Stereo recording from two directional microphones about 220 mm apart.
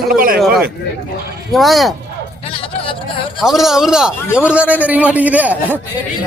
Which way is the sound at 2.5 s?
25° left (ahead or behind).